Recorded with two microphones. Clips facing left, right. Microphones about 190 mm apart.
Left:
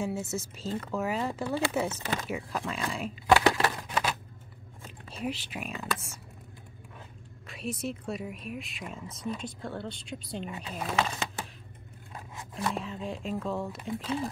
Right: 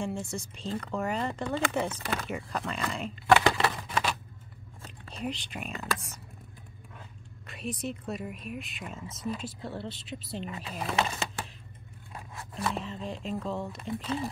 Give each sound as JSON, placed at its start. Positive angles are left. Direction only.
{"t": 0.0, "sound": "speech", "side_deg": 5}
{"t": 1.9, "sound": "speech", "side_deg": 25}
{"t": 2.2, "sound": "speech", "side_deg": 5}
{"t": 7.4, "sound": "speech", "side_deg": 0}
{"t": 12.5, "sound": "speech", "side_deg": 0}